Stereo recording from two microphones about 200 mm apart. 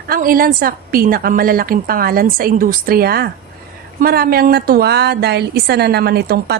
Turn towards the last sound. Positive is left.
turn(degrees=-55)  # may be behind; listen again after turning